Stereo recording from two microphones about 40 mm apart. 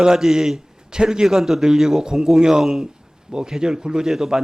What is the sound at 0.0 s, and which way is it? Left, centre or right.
A man's voice, centre.